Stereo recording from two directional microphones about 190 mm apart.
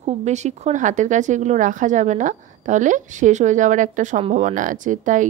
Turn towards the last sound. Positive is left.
turn(degrees=-40)  # may be behind; listen again after turning